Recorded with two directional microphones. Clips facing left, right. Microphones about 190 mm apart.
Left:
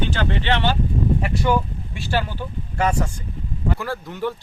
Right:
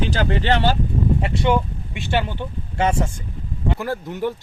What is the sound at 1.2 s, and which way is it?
Speech, 25° right (ahead or behind).